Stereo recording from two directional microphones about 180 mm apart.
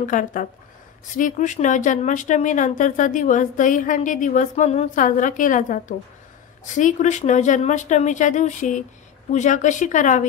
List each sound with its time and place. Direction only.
0.0 s speech: 45° left (ahead or behind)